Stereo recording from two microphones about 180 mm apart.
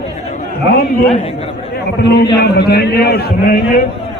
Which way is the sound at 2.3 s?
65° left (ahead or behind).